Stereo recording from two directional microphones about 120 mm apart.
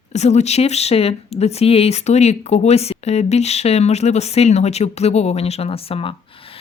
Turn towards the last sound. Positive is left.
turn(degrees=50)  # may be behind; listen again after turning